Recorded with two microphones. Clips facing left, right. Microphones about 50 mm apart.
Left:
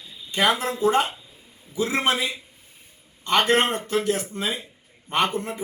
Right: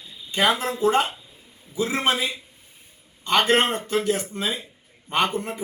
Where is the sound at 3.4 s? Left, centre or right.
Centre.